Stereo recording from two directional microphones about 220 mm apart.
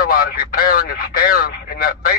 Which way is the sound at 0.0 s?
40° left (ahead or behind).